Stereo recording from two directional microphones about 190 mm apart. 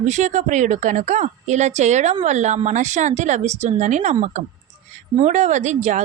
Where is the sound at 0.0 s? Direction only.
40° right (ahead or behind).